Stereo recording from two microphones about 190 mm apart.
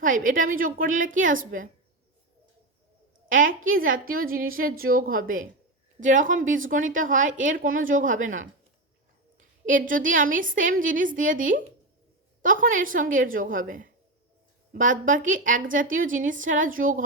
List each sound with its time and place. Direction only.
0.0 s a woman's voice: 45° right (ahead or behind)
3.2 s a woman's voice: 45° right (ahead or behind)
9.6 s a woman's voice: 45° right (ahead or behind)